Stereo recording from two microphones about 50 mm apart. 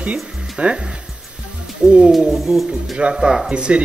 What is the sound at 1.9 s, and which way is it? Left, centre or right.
Speech, centre.